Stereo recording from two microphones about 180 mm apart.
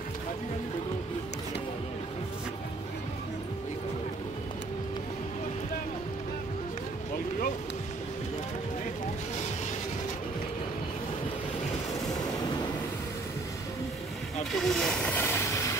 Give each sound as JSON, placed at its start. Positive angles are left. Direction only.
{"t": 12.1, "sound": "train", "side_deg": 20}
{"t": 14.5, "sound": "hiss", "side_deg": 0}